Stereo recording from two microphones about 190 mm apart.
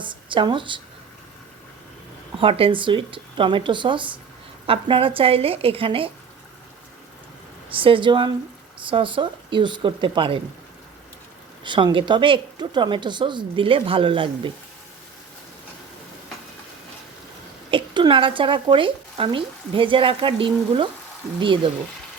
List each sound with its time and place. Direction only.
0.0 s speech: 25° right (ahead or behind)
2.4 s speech: 30° right (ahead or behind)
7.7 s speech: 30° right (ahead or behind)
11.6 s speech: 25° right (ahead or behind)
17.7 s speech: 25° right (ahead or behind)